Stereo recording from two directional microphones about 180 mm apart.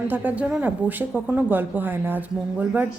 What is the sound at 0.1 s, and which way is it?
A woman's voice, 10° right (ahead or behind).